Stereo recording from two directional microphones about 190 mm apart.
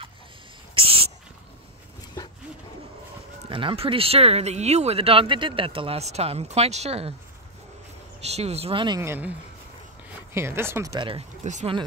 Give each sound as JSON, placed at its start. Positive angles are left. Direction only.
{"t": 0.7, "sound": "a sound", "side_deg": -30}
{"t": 3.4, "sound": "speech", "side_deg": -25}
{"t": 8.3, "sound": "speech", "side_deg": -35}
{"t": 9.0, "sound": "speech", "side_deg": -10}
{"t": 10.3, "sound": "speech", "side_deg": -15}
{"t": 11.4, "sound": "speech", "side_deg": -40}